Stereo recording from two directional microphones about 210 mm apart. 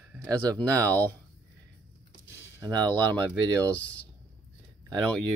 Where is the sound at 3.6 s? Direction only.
5° left (ahead or behind).